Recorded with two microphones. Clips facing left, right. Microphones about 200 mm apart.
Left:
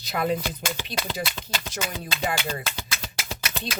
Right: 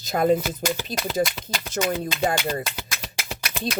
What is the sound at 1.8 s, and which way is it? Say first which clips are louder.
Speech: right 10 dB; 50° right (ahead or behind).